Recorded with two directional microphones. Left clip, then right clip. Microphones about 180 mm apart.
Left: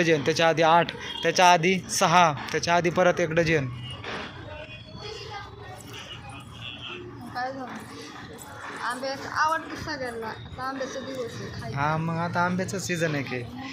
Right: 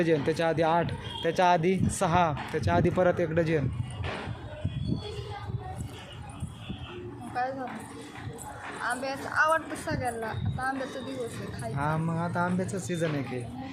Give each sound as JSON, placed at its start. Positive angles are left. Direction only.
{"t": 0.0, "sound": "speech", "side_deg": -5}
{"t": 7.4, "sound": "a sound", "side_deg": -30}
{"t": 8.8, "sound": "a woman's voice", "side_deg": -25}
{"t": 11.7, "sound": "speech", "side_deg": -10}